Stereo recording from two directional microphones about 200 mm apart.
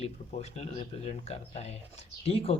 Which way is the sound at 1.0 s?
30° left (ahead or behind).